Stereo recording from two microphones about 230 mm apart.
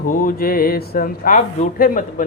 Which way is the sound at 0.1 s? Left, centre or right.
Left.